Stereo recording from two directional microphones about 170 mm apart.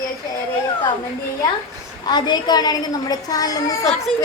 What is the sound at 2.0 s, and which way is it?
A woman's voice, 25° left (ahead or behind).